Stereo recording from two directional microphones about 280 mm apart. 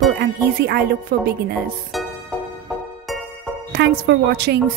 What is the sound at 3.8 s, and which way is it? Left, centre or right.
Speech, right.